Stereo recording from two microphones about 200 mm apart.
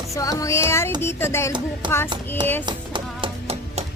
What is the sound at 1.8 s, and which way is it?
Music, 25° right (ahead or behind).